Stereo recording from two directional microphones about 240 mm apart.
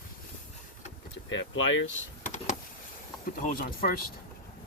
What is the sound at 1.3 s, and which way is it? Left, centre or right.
Speech, left.